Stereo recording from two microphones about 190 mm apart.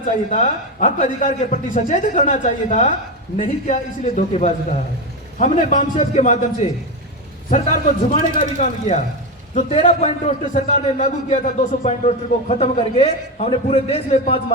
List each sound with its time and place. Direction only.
0.0 s a man's voice: 40° left (ahead or behind)